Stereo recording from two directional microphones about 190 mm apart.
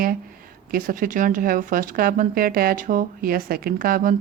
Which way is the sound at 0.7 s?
45° right (ahead or behind).